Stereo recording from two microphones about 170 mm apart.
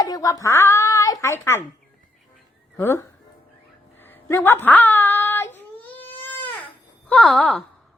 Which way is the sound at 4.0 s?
15° left (ahead or behind).